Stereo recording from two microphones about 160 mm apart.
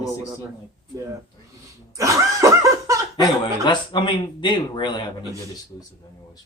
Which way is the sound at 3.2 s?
30° left (ahead or behind).